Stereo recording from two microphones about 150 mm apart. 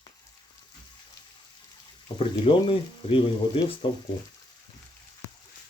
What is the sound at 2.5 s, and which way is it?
Speech, 35° left (ahead or behind).